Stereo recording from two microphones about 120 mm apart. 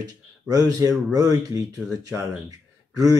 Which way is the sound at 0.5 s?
30° right (ahead or behind).